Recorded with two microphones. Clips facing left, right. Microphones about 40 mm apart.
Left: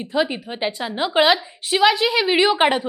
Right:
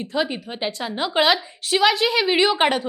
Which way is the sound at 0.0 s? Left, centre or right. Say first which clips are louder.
Left 2 dB; centre.